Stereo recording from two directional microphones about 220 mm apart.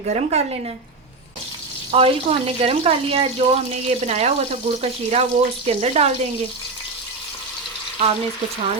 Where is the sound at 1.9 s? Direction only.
25° right (ahead or behind).